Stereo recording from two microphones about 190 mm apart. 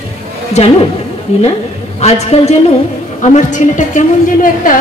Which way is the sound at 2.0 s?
35° left (ahead or behind).